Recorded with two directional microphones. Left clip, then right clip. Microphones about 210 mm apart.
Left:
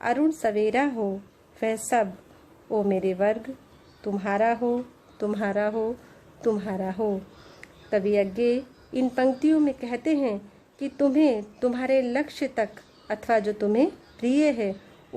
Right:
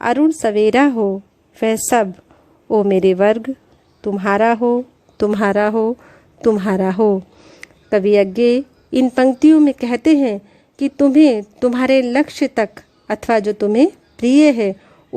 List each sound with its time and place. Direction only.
0.0 s a woman's voice: 40° right (ahead or behind)